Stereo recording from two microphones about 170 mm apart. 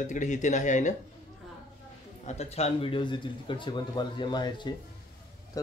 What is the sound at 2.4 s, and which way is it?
Speech, 35° left (ahead or behind).